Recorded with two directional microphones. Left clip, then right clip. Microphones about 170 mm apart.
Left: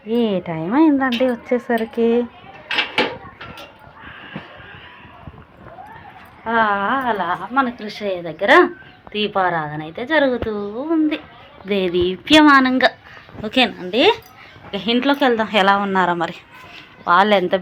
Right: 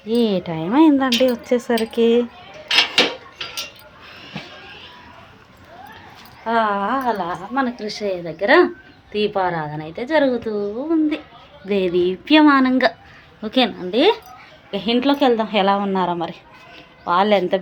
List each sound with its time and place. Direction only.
0.1 s speech: 20° right (ahead or behind)
6.4 s a woman's voice: centre (ahead or behind)
14.7 s a woman's voice: centre (ahead or behind)